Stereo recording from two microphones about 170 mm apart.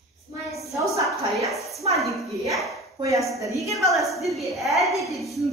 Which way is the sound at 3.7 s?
Centre (ahead or behind).